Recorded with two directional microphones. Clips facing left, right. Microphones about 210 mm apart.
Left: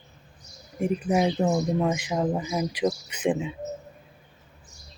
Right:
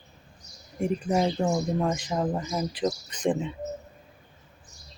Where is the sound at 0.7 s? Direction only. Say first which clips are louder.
Left 1 dB; 5° left (ahead or behind).